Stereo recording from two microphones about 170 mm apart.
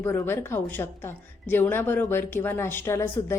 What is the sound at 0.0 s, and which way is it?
A woman's voice, 15° left (ahead or behind).